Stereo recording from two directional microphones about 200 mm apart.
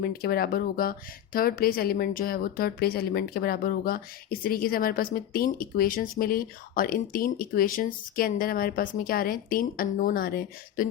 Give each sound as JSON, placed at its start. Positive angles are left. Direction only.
{"t": 0.0, "sound": "speech", "side_deg": 50}